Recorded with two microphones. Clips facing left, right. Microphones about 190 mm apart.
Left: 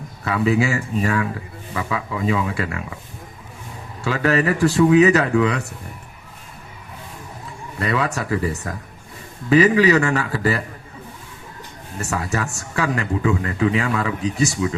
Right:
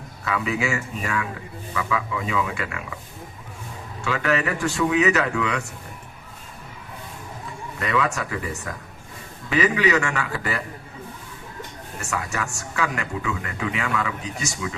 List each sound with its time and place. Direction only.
0.3 s speech: 35° left (ahead or behind)
4.0 s speech: 35° left (ahead or behind)
7.8 s speech: 35° left (ahead or behind)
12.1 s speech: 35° left (ahead or behind)